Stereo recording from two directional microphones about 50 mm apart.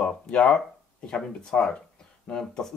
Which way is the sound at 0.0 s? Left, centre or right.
Centre.